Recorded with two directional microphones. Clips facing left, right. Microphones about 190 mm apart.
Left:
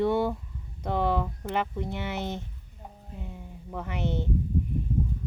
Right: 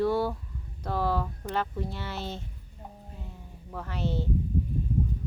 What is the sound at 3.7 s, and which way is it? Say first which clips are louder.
Speech: left 1 dB; 20° left (ahead or behind).